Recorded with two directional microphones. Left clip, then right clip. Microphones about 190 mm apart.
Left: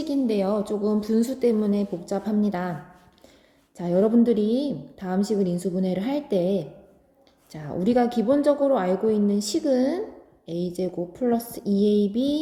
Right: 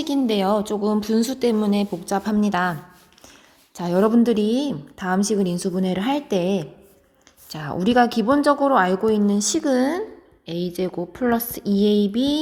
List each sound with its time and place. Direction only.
0.0 s a woman's voice: 20° right (ahead or behind)
3.8 s a woman's voice: 25° right (ahead or behind)
7.5 s a woman's voice: 20° right (ahead or behind)
11.3 s a sound: 10° left (ahead or behind)